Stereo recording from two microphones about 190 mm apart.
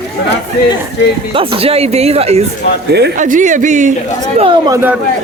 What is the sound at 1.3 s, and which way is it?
Speech, 30° right (ahead or behind).